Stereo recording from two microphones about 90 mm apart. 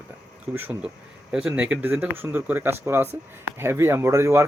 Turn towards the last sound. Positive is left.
turn(degrees=-30)  # may be behind; listen again after turning